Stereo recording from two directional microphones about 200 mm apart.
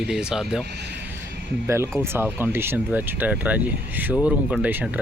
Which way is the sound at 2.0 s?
10° right (ahead or behind).